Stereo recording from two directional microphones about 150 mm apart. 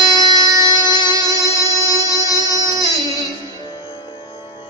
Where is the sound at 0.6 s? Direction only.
25° left (ahead or behind).